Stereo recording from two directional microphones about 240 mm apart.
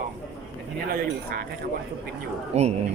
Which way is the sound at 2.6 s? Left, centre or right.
Right.